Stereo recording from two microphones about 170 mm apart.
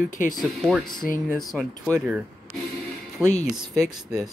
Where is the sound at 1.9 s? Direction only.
10° right (ahead or behind).